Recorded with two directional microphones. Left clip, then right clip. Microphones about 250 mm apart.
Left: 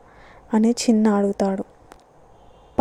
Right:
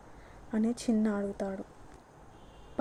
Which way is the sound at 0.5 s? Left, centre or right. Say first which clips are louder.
Left 12 dB; left.